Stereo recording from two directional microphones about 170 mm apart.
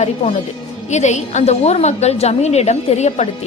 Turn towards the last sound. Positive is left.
turn(degrees=40)  # may be behind; listen again after turning